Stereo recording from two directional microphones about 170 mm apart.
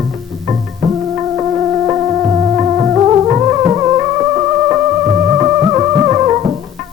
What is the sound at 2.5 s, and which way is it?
Music, 20° right (ahead or behind).